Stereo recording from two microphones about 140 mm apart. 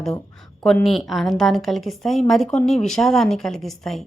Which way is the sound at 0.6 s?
5° left (ahead or behind).